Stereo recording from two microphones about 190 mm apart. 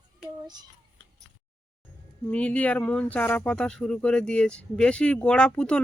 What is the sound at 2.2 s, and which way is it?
Speech, 5° left (ahead or behind).